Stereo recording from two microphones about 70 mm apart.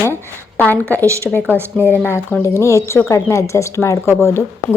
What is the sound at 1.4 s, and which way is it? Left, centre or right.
Speech, right.